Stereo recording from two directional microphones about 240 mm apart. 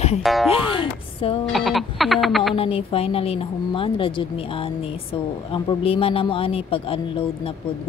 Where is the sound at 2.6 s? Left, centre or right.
Left.